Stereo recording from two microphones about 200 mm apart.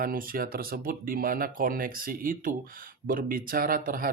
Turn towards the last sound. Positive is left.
turn(degrees=-45)  # may be behind; listen again after turning